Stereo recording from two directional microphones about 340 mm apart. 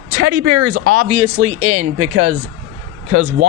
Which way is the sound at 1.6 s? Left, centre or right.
Left.